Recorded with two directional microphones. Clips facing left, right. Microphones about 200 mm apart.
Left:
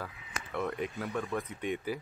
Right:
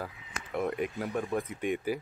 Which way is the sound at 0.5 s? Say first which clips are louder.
Right 3 dB; 20° right (ahead or behind).